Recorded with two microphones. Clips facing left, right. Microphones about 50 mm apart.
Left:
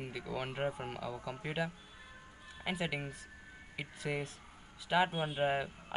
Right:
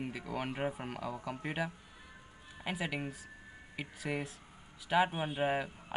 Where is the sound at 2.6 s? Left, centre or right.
Centre.